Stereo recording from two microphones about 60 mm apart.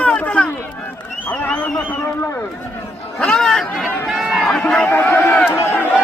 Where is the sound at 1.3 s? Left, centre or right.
Left.